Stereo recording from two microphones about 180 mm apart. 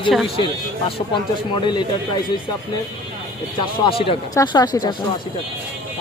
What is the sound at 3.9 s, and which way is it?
Speech, 30° left (ahead or behind).